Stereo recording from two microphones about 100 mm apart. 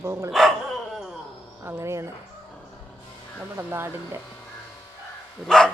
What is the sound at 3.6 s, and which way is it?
Speech, 20° right (ahead or behind).